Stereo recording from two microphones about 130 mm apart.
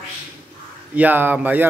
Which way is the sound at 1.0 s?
15° right (ahead or behind).